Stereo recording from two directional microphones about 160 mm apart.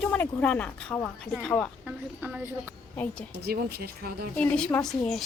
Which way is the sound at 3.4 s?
80° right.